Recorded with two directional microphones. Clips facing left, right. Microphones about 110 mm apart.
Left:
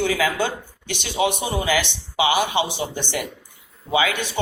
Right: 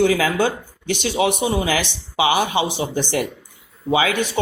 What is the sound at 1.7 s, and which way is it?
Speech, 35° right (ahead or behind).